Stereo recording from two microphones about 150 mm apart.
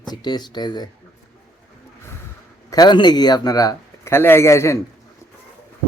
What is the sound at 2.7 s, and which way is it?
Speech, 30° left (ahead or behind).